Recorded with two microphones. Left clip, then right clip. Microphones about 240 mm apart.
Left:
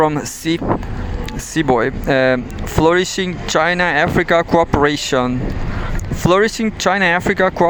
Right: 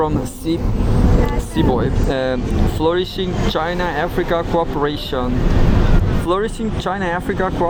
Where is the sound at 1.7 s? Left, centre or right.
Left.